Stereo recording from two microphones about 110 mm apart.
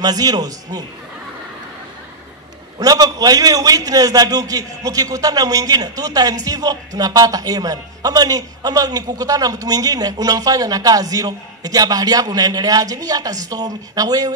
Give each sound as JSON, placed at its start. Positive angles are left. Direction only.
{"t": 0.0, "sound": "a man's voice", "side_deg": -35}
{"t": 2.8, "sound": "a man's voice", "side_deg": -35}